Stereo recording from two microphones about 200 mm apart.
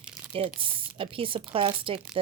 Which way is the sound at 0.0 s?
5° right (ahead or behind).